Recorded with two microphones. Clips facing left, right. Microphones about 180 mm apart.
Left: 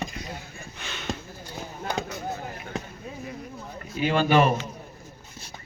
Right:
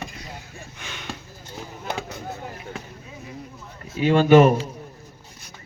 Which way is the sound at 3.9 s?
25° right (ahead or behind).